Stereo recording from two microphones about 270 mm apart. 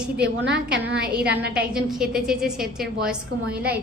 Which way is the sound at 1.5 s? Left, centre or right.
Centre.